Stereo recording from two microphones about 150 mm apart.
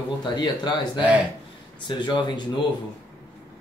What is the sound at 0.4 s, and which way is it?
Speech, 30° left (ahead or behind).